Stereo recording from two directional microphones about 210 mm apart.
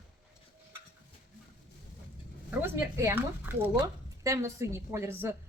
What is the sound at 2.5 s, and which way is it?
Speech, 10° right (ahead or behind).